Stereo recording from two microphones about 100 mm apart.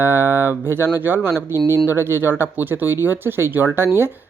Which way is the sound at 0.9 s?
20° right (ahead or behind).